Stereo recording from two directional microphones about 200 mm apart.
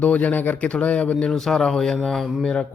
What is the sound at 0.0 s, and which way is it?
Speech, 10° left (ahead or behind).